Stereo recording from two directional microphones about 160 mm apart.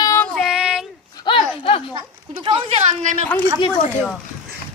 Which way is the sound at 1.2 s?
30° left (ahead or behind).